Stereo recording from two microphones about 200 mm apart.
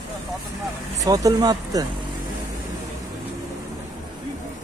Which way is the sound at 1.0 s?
20° right (ahead or behind).